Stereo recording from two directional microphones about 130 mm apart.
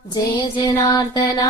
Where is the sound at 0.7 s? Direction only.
30° left (ahead or behind).